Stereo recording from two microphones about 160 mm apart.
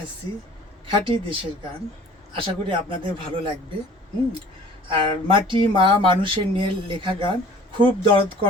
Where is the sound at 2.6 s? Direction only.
30° right (ahead or behind).